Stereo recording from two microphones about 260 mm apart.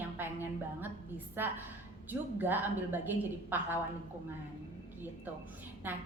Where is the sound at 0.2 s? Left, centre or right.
Centre.